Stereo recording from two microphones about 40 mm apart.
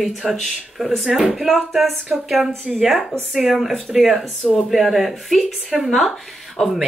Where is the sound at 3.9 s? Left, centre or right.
Centre.